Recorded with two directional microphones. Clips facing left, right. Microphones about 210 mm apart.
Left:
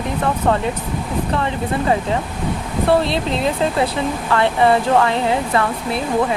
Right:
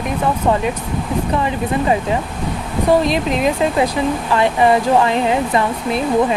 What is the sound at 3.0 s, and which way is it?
Speech, 15° right (ahead or behind).